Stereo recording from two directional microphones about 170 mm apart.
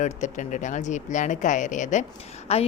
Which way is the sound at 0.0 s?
45° left (ahead or behind).